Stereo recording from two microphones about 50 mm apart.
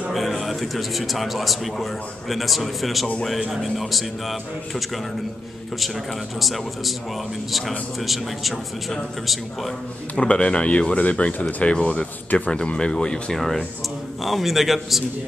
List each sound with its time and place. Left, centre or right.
0.1 s a man's voice: centre
6.4 s a man's voice: centre
8.0 s a man's voice: centre
10.1 s speech: left
14.2 s a man's voice: centre